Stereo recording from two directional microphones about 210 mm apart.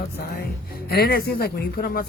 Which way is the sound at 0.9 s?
50° left (ahead or behind).